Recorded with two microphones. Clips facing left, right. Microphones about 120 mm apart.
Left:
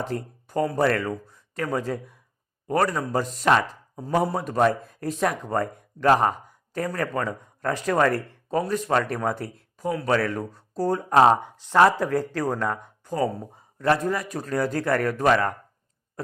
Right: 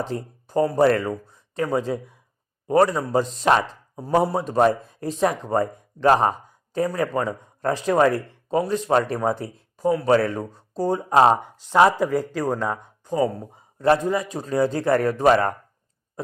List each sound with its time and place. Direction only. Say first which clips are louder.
0.0 s speech: right 1 dB; 25° right (ahead or behind)
13.2 s speech: right 2 dB; centre (ahead or behind)
13.7 s speech: right 3 dB; 30° right (ahead or behind)